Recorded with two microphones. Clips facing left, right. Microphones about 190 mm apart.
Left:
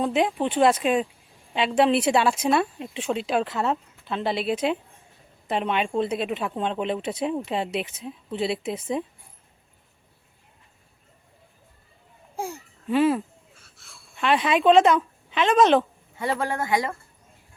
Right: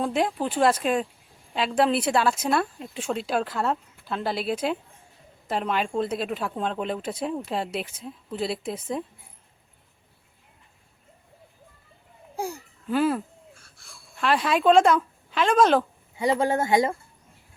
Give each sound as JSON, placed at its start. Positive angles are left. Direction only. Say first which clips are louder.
{"t": 0.0, "sound": "a woman's voice", "louder": "left 2 dB", "side_deg": 0}
{"t": 12.4, "sound": "wheeze", "louder": "right 1 dB", "side_deg": 0}
{"t": 16.1, "sound": "speech", "louder": "right 4 dB", "side_deg": -15}